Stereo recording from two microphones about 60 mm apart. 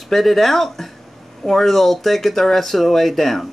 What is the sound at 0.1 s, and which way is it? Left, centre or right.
Speech, centre.